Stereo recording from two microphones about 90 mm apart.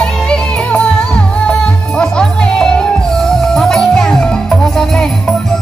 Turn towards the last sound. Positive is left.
turn(degrees=5)  # may be behind; listen again after turning